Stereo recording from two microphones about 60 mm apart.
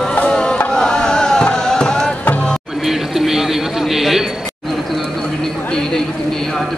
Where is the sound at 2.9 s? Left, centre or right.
Centre.